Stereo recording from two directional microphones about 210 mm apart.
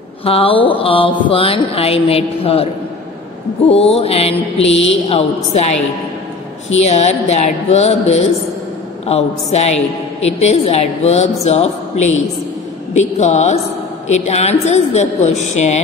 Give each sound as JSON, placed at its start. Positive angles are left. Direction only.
{"t": 0.2, "sound": "mantra", "side_deg": 25}
{"t": 4.8, "sound": "a woman's voice", "side_deg": 30}
{"t": 6.8, "sound": "a woman's voice", "side_deg": 30}